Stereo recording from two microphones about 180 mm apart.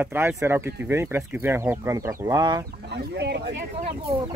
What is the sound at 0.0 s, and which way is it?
Speech, 10° right (ahead or behind).